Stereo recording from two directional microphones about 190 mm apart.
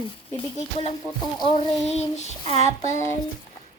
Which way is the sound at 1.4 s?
25° left (ahead or behind).